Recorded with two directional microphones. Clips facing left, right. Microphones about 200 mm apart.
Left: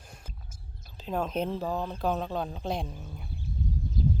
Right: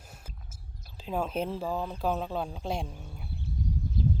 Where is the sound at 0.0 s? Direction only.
5° right (ahead or behind).